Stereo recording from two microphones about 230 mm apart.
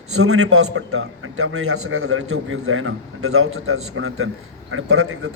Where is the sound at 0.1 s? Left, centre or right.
Right.